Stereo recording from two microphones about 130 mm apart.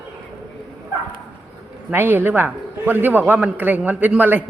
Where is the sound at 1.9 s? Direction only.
15° right (ahead or behind).